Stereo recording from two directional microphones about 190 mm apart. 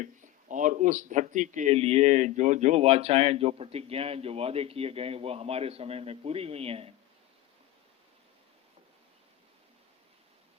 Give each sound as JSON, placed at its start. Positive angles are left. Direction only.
{"t": 0.0, "sound": "speech", "side_deg": -40}